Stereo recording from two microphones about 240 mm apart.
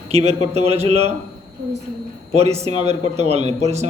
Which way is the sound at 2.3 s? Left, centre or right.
Right.